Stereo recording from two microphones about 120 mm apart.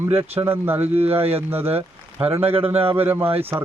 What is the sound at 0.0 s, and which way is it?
Speech, 20° right (ahead or behind).